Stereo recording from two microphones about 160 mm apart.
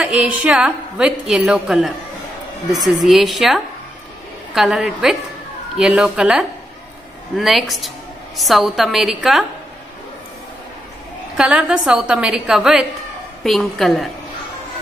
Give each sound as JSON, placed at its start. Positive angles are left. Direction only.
{"t": 0.0, "sound": "a woman's voice", "side_deg": -5}
{"t": 2.9, "sound": "a woman's voice", "side_deg": 0}
{"t": 11.3, "sound": "a woman's voice", "side_deg": -5}